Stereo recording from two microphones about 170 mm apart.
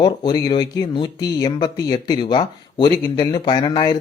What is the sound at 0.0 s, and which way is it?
Speech, 25° left (ahead or behind).